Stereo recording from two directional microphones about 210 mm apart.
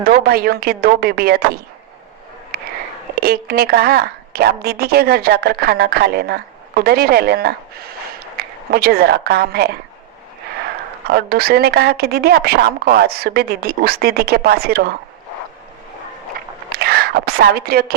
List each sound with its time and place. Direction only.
0.0 s a woman's voice: 45° right (ahead or behind)
2.5 s a sound: 45° right (ahead or behind)
3.2 s a woman's voice: 45° right (ahead or behind)
8.4 s a sound: 50° right (ahead or behind)
8.7 s a woman's voice: 45° right (ahead or behind)
11.1 s a woman's voice: 45° right (ahead or behind)
16.6 s speech: 45° right (ahead or behind)